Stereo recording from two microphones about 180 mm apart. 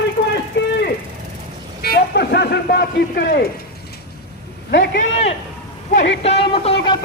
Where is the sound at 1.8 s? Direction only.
65° left (ahead or behind).